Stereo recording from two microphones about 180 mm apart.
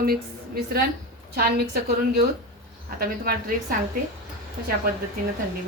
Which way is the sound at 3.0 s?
55° right (ahead or behind).